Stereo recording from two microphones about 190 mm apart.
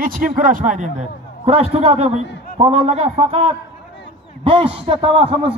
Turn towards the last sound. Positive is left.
turn(degrees=-30)  # may be behind; listen again after turning